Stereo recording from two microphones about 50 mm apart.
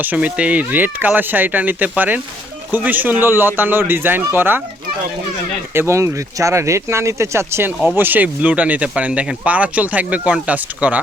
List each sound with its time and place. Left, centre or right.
0.0 s speech: right
5.9 s speech: right
7.9 s speech: right